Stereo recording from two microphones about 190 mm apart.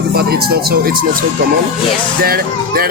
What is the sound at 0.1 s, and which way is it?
Speech, 55° right (ahead or behind).